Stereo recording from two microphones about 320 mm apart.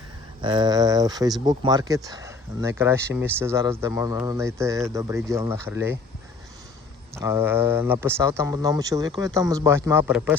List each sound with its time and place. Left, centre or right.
0.4 s speech: centre
7.1 s speech: centre